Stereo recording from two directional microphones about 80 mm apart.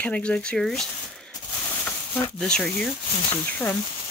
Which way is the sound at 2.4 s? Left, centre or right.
Centre.